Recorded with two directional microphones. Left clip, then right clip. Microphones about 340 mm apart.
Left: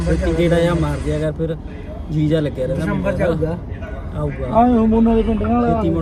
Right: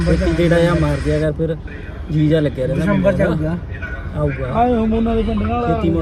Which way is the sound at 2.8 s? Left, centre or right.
Centre.